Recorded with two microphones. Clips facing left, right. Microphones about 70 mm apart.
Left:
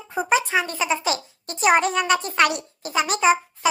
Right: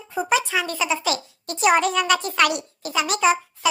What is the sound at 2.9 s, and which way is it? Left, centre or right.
Speech, left.